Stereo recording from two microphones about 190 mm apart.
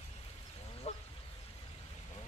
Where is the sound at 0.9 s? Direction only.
35° left (ahead or behind).